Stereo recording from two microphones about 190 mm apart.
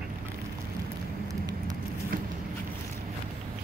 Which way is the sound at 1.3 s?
20° right (ahead or behind).